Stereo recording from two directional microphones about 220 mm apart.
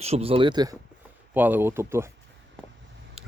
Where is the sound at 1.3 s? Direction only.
10° right (ahead or behind).